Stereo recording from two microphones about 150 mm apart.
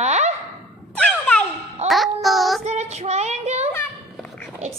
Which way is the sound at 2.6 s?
45° right (ahead or behind).